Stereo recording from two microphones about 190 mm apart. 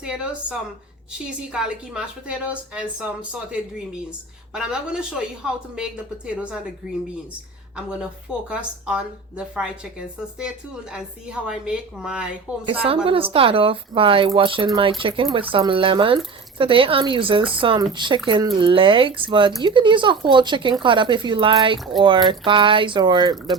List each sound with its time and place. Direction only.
0.0 s a woman's voice: 5° right (ahead or behind)
10.9 s a woman's voice: 5° right (ahead or behind)
13.1 s speech: 30° right (ahead or behind)